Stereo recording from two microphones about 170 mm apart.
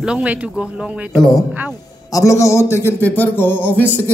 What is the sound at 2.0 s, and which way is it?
A man's voice, 20° left (ahead or behind).